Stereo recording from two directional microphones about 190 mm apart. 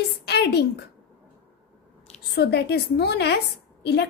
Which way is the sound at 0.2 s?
60° left (ahead or behind).